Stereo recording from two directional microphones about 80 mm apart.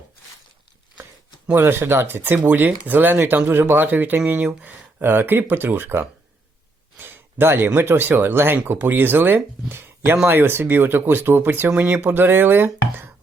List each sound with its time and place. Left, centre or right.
1.5 s speech: right